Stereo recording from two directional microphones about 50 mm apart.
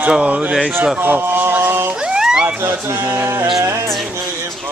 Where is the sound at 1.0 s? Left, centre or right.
Right.